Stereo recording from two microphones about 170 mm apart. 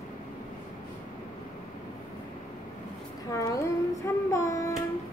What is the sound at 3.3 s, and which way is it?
Child singing, 20° left (ahead or behind).